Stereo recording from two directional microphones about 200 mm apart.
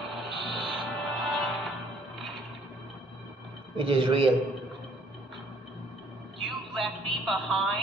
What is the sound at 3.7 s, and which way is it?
Speech, 25° right (ahead or behind).